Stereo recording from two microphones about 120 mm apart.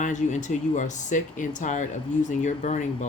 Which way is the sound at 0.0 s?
85° left.